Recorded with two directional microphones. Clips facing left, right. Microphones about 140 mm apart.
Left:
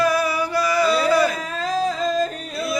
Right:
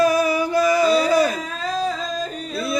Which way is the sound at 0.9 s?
15° right (ahead or behind).